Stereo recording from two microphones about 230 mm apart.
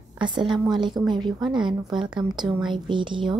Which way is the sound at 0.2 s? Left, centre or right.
Centre.